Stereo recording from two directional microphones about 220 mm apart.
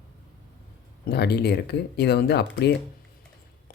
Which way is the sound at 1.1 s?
45° left (ahead or behind).